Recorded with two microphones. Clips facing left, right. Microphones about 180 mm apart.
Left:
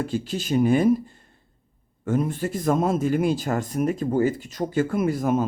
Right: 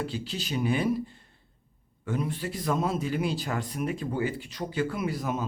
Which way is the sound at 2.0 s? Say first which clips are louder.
Left 7 dB; 45° left (ahead or behind).